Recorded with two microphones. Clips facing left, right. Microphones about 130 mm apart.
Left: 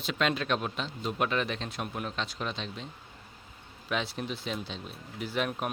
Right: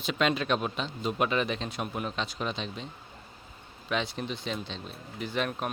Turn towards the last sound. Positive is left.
turn(degrees=5)  # may be behind; listen again after turning